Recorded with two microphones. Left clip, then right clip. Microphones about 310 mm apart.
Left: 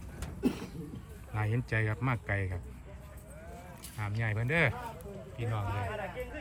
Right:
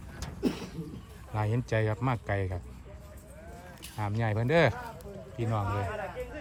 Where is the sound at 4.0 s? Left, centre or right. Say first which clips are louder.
Right 5 dB; centre.